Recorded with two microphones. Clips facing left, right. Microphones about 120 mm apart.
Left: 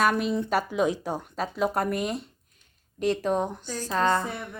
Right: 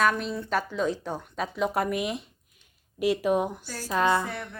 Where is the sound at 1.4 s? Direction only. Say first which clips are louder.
Even; centre (ahead or behind).